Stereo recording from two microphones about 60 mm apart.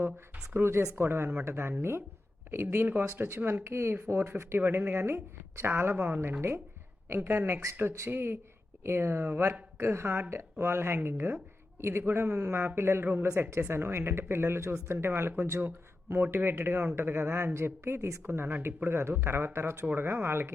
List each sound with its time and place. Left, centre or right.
0.5 s a woman's voice: right
1.0 s a woman's voice: right
3.2 s a woman's voice: right
7.2 s a woman's voice: right